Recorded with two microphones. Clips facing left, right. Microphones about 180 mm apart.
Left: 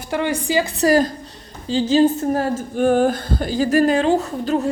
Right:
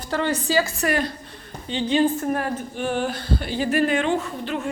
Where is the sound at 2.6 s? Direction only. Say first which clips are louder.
Left 9 dB; 45° left (ahead or behind).